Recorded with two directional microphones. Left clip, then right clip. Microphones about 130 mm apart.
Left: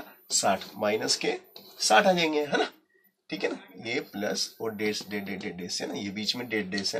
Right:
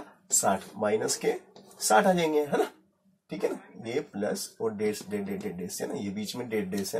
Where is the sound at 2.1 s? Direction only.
25° right (ahead or behind).